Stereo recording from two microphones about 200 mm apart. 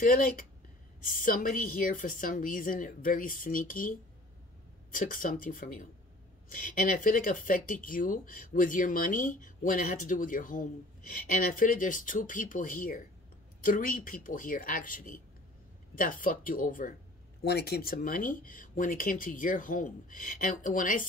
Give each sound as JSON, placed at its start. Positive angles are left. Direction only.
{"t": 0.0, "sound": "speech", "side_deg": 45}
{"t": 4.9, "sound": "speech", "side_deg": 40}
{"t": 17.4, "sound": "speech", "side_deg": 55}